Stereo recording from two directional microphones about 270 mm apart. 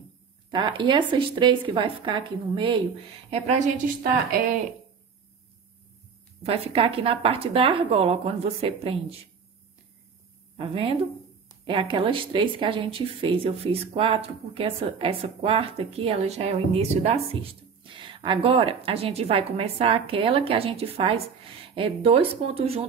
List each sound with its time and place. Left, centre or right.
0.5 s a woman's voice: centre
6.4 s speech: right
10.6 s speech: right